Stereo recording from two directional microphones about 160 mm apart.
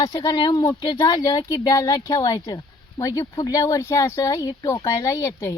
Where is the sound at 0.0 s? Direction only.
25° left (ahead or behind).